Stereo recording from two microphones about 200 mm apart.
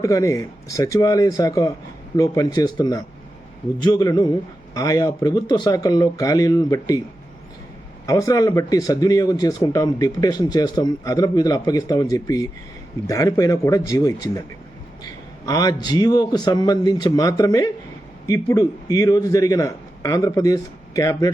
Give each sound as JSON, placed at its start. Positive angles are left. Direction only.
{"t": 0.0, "sound": "a man's voice", "side_deg": 15}
{"t": 8.0, "sound": "a man's voice", "side_deg": 15}